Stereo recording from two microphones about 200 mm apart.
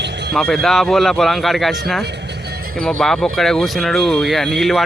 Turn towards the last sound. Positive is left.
turn(degrees=0)  # may be behind; listen again after turning